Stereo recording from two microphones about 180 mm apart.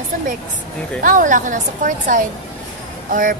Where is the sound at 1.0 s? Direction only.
45° right (ahead or behind).